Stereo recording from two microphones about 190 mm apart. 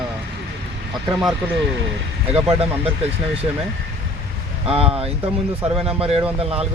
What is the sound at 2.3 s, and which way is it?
Speech, 30° right (ahead or behind).